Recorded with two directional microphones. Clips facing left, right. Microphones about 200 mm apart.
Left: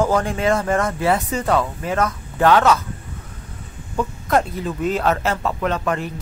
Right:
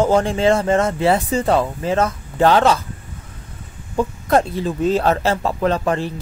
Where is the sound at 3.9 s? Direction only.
30° right (ahead or behind).